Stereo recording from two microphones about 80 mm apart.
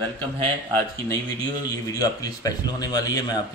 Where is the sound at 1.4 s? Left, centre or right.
Left.